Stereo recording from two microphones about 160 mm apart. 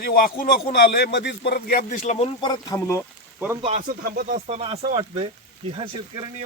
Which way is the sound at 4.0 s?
75° right (ahead or behind).